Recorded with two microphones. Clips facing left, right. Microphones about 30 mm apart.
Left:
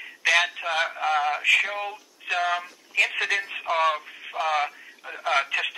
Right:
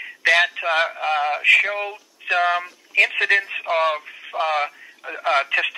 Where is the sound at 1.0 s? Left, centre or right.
Right.